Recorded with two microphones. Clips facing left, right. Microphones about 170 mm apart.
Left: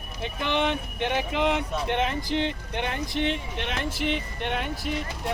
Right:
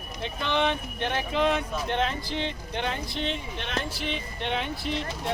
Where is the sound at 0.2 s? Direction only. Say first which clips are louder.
Left 1 dB; 15° left (ahead or behind).